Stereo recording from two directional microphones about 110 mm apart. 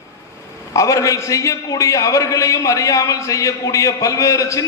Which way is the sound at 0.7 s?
30° left (ahead or behind).